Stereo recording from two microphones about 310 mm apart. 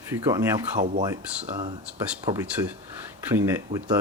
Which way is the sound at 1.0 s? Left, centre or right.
Centre.